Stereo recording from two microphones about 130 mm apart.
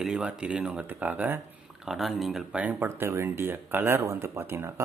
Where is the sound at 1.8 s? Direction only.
Centre (ahead or behind).